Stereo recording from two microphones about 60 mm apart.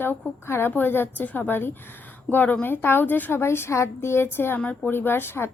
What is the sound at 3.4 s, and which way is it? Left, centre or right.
A woman's voice, left.